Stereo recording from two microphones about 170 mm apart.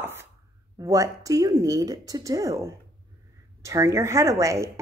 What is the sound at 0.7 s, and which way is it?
Speech, 20° right (ahead or behind).